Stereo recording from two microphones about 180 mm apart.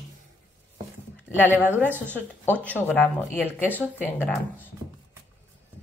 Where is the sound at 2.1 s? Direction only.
10° left (ahead or behind).